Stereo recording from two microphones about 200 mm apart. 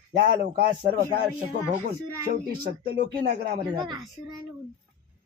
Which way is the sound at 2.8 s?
50° right (ahead or behind).